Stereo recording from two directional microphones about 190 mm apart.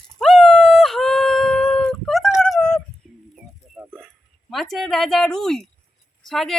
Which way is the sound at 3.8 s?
15° right (ahead or behind).